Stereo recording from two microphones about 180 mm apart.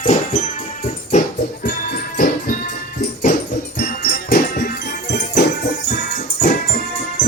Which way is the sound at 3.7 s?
65° left (ahead or behind).